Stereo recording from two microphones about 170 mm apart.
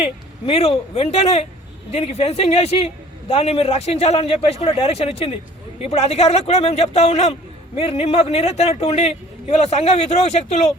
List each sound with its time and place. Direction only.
0.0 s a man's voice: 35° left (ahead or behind)